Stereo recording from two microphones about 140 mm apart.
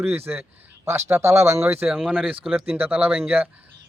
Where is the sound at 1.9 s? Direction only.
5° right (ahead or behind).